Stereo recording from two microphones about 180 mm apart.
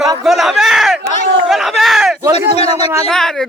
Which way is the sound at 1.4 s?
Centre (ahead or behind).